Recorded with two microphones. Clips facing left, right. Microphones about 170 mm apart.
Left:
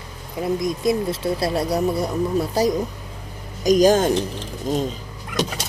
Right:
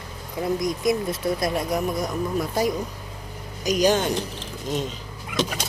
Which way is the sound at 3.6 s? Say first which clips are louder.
Left 6 dB; 45° left (ahead or behind).